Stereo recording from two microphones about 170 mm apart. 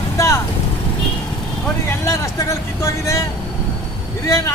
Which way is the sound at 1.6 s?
15° left (ahead or behind).